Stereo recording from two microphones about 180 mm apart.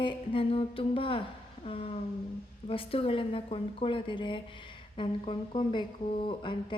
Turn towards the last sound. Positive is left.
turn(degrees=25)  # may be behind; listen again after turning